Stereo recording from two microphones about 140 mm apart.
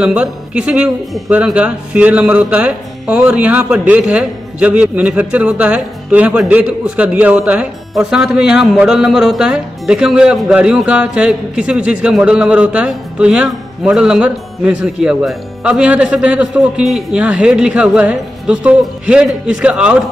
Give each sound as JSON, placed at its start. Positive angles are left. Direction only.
{"t": 0.0, "sound": "speech", "side_deg": -5}